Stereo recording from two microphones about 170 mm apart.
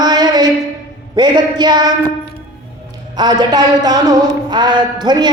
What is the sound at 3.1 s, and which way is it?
Speech, 25° right (ahead or behind).